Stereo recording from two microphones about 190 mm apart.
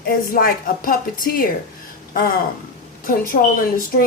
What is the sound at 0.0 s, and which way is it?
Speech, 50° left (ahead or behind).